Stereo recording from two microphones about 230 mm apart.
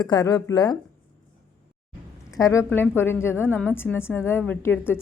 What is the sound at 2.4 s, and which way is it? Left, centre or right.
Speech, centre.